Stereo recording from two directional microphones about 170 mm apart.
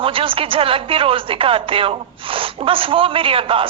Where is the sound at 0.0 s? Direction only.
30° right (ahead or behind).